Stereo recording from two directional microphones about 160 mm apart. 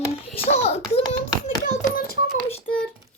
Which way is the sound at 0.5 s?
40° left (ahead or behind).